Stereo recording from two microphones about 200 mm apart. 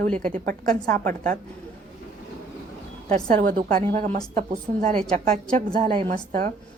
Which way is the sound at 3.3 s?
45° right (ahead or behind).